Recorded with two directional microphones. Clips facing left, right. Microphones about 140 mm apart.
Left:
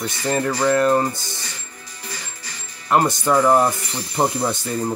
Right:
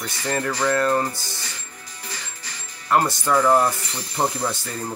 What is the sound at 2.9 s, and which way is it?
Speech, 20° left (ahead or behind).